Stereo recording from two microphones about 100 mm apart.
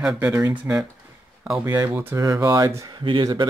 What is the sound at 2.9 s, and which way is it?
Speech, 55° right (ahead or behind).